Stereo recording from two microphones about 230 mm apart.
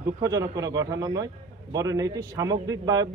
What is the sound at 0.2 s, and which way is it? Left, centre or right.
A man's voice, centre.